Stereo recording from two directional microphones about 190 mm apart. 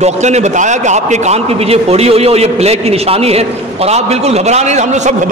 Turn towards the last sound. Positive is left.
turn(degrees=-40)  # may be behind; listen again after turning